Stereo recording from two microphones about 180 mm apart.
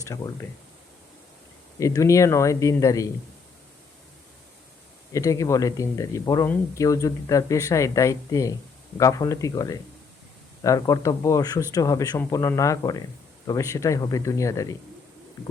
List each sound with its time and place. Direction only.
0.0 s speech: 20° left (ahead or behind)
1.8 s speech: 15° left (ahead or behind)
5.1 s speech: 15° left (ahead or behind)